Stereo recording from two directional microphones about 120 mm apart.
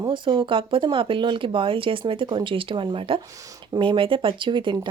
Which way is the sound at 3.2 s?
30° right (ahead or behind).